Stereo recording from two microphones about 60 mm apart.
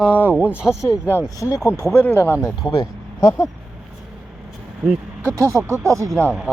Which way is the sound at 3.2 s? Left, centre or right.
Left.